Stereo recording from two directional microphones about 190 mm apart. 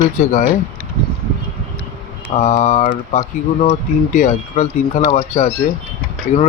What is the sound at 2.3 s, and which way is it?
Speech, 35° left (ahead or behind).